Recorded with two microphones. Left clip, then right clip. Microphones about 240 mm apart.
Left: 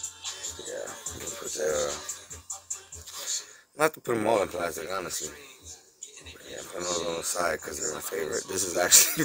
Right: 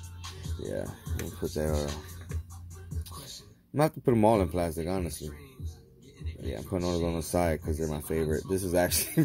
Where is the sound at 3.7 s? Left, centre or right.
Centre.